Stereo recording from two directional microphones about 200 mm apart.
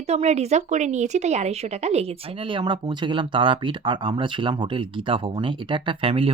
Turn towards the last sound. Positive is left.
turn(degrees=-25)  # may be behind; listen again after turning